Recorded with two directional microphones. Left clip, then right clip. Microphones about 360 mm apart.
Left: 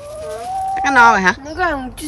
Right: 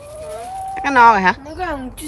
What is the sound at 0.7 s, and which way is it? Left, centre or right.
Speech, centre.